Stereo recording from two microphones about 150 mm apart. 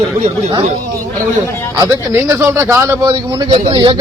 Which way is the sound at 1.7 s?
20° right (ahead or behind).